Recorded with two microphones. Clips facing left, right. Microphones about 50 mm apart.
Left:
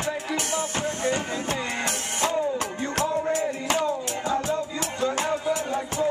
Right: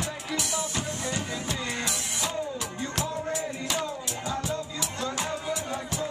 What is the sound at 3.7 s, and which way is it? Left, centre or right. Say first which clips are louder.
Music: left 8 dB; left.